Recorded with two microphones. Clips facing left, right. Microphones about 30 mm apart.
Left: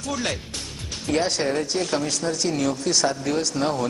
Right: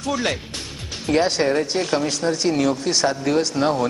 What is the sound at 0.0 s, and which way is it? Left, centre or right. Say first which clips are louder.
A woman's voice: right 4 dB; centre.